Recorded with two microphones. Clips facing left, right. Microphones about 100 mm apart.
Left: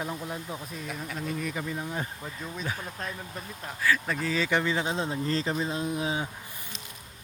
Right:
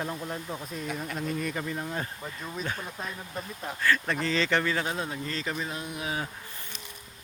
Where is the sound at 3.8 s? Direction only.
5° left (ahead or behind); by 6.2 s 25° left (ahead or behind).